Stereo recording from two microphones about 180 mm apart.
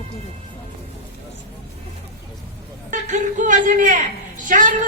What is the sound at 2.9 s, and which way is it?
A man's voice, 45° right (ahead or behind).